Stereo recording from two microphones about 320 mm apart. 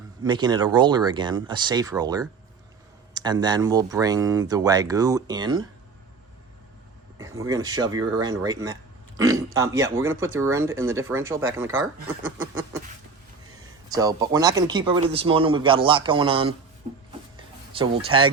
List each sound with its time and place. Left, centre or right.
0.3 s speech: centre
7.2 s speech: centre
13.9 s speech: centre
17.3 s a sound: centre